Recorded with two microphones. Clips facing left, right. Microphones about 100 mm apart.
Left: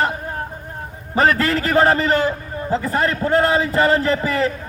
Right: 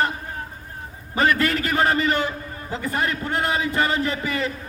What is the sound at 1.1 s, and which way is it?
A man's voice, 35° left (ahead or behind).